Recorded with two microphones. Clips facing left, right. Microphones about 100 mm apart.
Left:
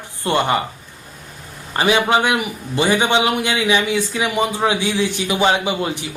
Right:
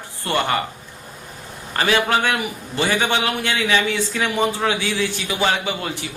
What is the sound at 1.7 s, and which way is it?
A man's voice, 20° left (ahead or behind).